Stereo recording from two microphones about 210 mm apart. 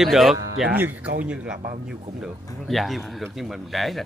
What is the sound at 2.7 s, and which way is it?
A man's voice, centre (ahead or behind).